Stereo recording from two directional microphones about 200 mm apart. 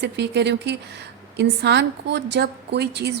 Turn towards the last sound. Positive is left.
turn(degrees=-55)  # may be behind; listen again after turning